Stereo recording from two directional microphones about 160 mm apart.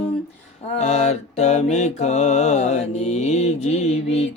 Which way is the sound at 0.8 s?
45° left (ahead or behind).